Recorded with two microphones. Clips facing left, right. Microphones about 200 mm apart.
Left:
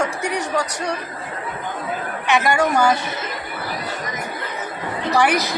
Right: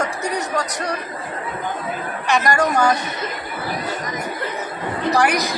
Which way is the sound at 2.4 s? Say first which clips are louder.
Even; 5° left (ahead or behind).